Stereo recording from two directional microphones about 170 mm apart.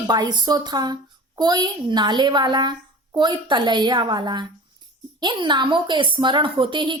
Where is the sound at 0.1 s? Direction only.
25° right (ahead or behind).